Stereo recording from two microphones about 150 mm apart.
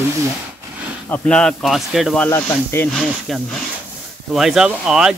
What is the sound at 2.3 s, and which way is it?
Speech, 15° left (ahead or behind).